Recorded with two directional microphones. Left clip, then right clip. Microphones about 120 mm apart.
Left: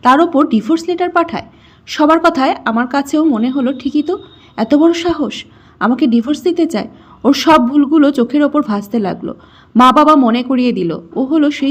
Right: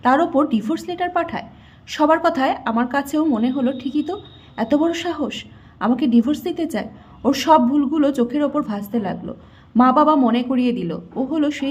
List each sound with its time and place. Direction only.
0.0 s a woman's voice: 25° left (ahead or behind)